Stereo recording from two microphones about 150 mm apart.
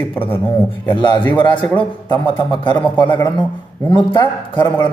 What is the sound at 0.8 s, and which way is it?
A man's voice, 30° left (ahead or behind).